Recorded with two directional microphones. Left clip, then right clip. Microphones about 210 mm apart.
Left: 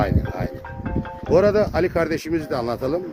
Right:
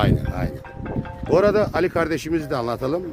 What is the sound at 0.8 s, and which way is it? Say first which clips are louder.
Music: left 1 dB; centre (ahead or behind).